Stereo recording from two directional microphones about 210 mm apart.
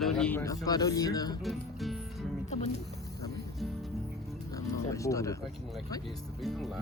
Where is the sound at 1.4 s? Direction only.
Centre (ahead or behind).